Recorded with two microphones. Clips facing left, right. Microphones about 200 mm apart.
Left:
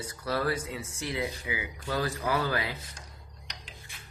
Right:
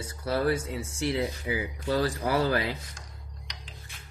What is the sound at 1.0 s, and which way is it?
Speech, 35° right (ahead or behind).